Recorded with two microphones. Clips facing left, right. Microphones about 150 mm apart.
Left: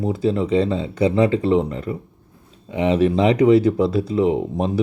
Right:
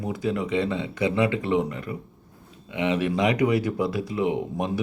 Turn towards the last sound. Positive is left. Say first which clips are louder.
# left 6 dB
turn(degrees=30)  # may be behind; listen again after turning